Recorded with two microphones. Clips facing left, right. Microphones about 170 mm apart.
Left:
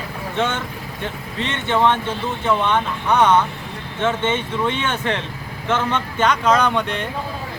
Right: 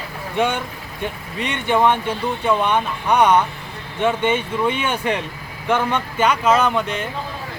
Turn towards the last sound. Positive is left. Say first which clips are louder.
# even
turn(degrees=0)  # may be behind; listen again after turning